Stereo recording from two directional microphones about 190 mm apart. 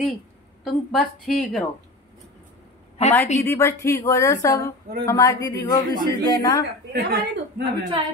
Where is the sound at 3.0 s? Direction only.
35° left (ahead or behind).